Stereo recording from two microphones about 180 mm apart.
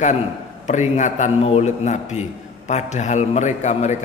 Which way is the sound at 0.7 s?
40° left (ahead or behind).